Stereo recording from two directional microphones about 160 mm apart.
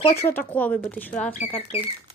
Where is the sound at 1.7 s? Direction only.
35° left (ahead or behind).